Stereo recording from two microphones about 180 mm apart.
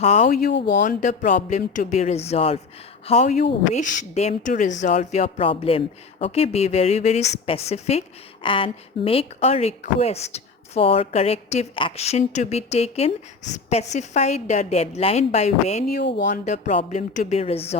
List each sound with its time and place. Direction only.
0.0 s speech: 40° left (ahead or behind)
15.9 s speech: 65° left (ahead or behind)
16.2 s speech: 45° left (ahead or behind)